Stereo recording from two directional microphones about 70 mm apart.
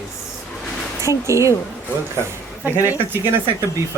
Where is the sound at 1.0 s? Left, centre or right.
Right.